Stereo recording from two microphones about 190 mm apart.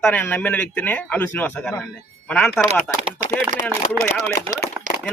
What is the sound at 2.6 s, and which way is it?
Speech, 35° right (ahead or behind).